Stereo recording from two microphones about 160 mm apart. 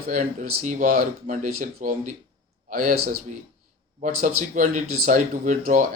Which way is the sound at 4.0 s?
50° right (ahead or behind).